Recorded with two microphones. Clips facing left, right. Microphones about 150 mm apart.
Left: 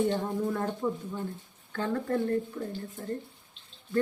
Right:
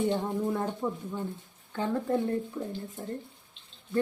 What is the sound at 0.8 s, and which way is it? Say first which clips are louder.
Speech: left 1 dB; 5° right (ahead or behind).